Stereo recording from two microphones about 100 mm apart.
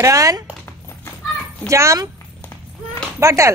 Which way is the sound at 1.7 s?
30° right (ahead or behind).